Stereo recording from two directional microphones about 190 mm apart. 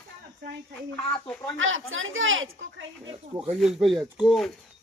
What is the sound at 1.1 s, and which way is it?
Speech, 5° left (ahead or behind).